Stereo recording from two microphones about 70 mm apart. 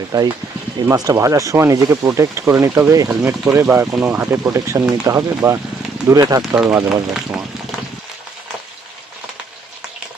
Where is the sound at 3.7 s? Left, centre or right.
Right.